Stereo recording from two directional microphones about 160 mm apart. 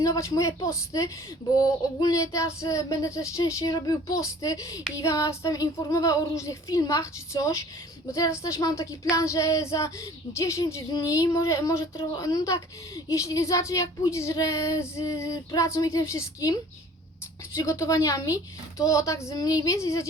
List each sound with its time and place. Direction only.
0.0 s speech: 20° left (ahead or behind)